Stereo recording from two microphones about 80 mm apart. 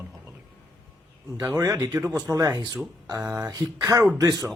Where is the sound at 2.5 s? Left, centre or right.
Right.